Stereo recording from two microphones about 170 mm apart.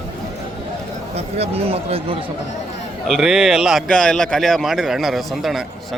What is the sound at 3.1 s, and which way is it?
A man's voice, 5° right (ahead or behind).